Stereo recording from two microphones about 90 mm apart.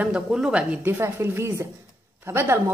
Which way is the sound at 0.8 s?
30° right (ahead or behind).